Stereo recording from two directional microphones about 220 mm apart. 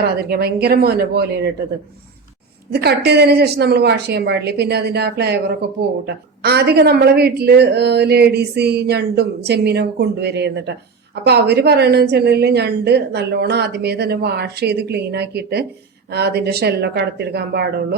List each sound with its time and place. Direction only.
0.2 s a woman's voice: 45° right (ahead or behind)
2.7 s a woman's voice: 50° right (ahead or behind)
6.4 s a woman's voice: 45° right (ahead or behind)